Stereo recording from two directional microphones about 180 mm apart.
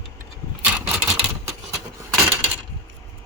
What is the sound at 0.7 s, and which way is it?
Typewriter, 10° right (ahead or behind).